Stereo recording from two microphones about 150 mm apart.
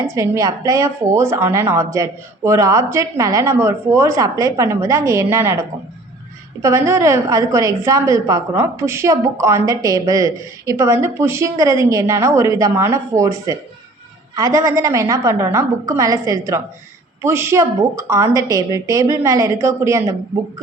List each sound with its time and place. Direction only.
0.0 s a woman's voice: 20° right (ahead or behind)